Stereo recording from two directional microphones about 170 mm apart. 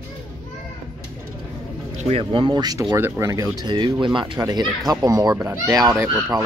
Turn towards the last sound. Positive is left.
turn(degrees=-20)  # may be behind; listen again after turning